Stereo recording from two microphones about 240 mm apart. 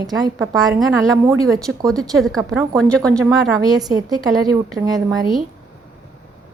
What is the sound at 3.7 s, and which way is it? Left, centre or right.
A woman's voice, centre.